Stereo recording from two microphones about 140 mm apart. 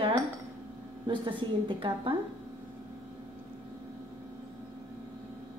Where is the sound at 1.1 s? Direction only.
35° right (ahead or behind).